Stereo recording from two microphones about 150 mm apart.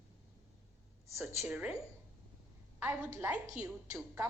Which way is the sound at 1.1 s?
Centre (ahead or behind).